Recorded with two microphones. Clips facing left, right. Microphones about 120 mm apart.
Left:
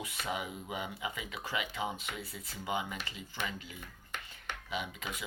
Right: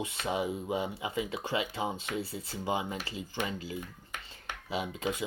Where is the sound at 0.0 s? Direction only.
30° right (ahead or behind).